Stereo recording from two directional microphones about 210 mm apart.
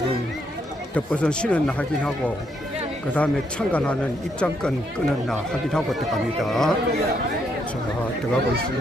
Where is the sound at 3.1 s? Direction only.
5° left (ahead or behind).